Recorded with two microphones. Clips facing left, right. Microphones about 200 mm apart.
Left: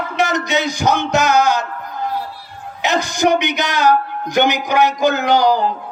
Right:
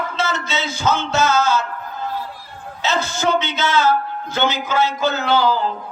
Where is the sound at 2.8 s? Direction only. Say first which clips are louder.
Left 4 dB; 15° left (ahead or behind).